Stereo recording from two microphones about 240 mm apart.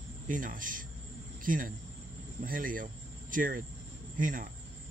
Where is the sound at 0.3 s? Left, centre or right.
Right.